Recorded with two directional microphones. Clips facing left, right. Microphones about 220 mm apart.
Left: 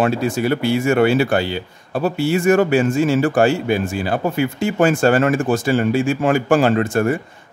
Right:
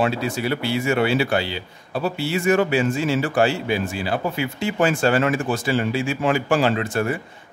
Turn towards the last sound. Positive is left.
turn(degrees=45)  # may be behind; listen again after turning